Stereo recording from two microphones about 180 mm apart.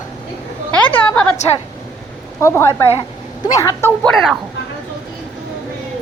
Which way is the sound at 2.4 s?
15° left (ahead or behind).